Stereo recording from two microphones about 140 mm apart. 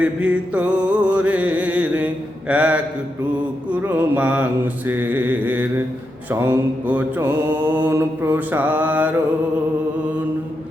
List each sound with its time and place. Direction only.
0.0 s music: 10° right (ahead or behind)
2.5 s mantra: 10° right (ahead or behind)